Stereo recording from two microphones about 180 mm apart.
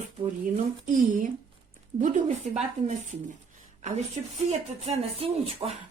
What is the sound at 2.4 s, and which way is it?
Speech, 40° right (ahead or behind).